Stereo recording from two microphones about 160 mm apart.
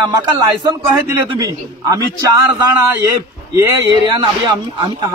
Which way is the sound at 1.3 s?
20° right (ahead or behind).